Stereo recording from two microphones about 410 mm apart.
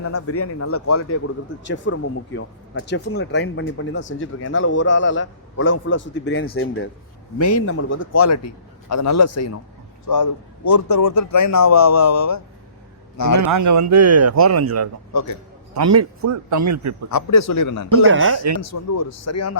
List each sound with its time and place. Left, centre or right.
0.0 s a man's voice: left
13.4 s speech: right
15.1 s a man's voice: left
15.7 s speech: right
17.1 s a man's voice: left
18.1 s speech: right
18.6 s a man's voice: left